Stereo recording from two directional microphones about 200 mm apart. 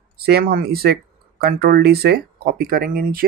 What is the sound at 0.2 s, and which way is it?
Speech, 50° right (ahead or behind).